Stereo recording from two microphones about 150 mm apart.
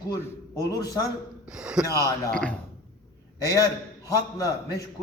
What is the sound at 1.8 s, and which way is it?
Speech, 20° left (ahead or behind).